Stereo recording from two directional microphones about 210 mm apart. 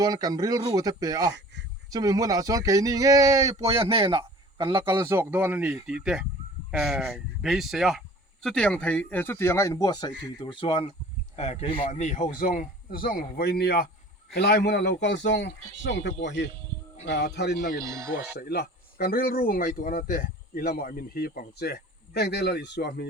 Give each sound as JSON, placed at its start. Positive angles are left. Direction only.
{"t": 0.0, "sound": "speech", "side_deg": -20}
{"t": 3.6, "sound": "a man's voice", "side_deg": -25}
{"t": 17.8, "sound": "speech", "side_deg": -15}
{"t": 18.3, "sound": "speech", "side_deg": 50}